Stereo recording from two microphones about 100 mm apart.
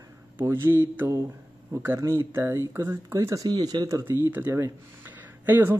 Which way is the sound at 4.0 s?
20° right (ahead or behind).